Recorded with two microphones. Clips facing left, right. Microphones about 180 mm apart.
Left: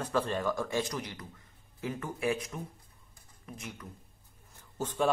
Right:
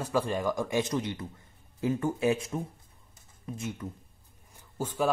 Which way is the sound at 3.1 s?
25° right (ahead or behind).